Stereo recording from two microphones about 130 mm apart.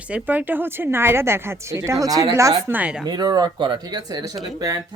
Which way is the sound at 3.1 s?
30° right (ahead or behind).